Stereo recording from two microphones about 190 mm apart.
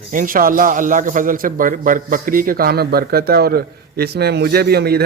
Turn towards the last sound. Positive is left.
turn(degrees=-55)  # may be behind; listen again after turning